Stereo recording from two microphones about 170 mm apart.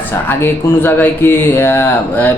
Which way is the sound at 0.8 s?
10° left (ahead or behind).